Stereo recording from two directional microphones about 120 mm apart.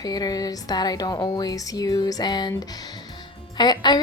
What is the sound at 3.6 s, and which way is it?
Speech, 35° left (ahead or behind).